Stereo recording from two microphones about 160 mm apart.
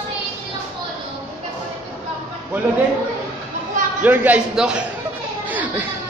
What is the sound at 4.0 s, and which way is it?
Speech, 10° right (ahead or behind).